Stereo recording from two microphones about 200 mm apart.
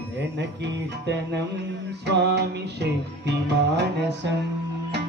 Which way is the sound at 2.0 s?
60° right (ahead or behind).